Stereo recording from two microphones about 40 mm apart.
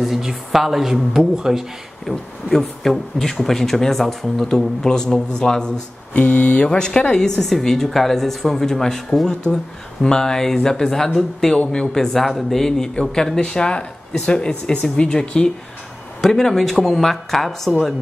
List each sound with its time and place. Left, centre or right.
0.0 s speech: centre
2.0 s speech: centre
6.1 s speech: left; by 9.3 s centre
9.3 s speech: left
12.2 s a woman's voice: centre